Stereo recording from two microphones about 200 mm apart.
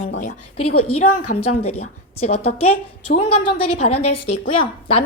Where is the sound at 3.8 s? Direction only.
30° left (ahead or behind).